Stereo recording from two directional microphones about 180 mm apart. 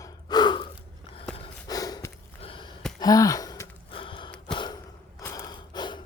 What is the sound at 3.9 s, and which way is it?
Gasp, 30° left (ahead or behind).